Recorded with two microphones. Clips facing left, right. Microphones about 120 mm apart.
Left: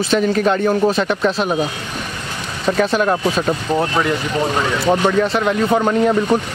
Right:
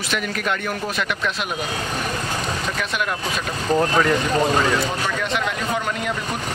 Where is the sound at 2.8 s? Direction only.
35° left (ahead or behind).